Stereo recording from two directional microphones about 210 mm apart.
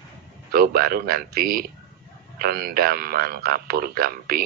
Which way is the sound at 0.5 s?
45° right (ahead or behind).